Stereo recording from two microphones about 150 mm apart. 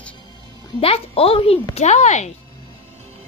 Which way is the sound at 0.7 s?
40° left (ahead or behind).